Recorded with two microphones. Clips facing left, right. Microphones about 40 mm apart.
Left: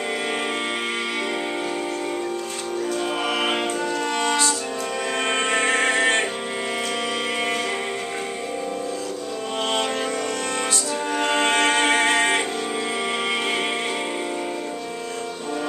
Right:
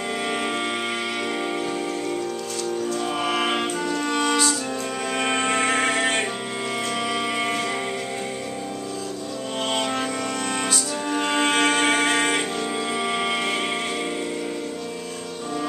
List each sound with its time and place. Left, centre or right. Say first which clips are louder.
3.0 s music: even; centre
7.3 s music: even; centre
11.1 s music: left 1 dB; centre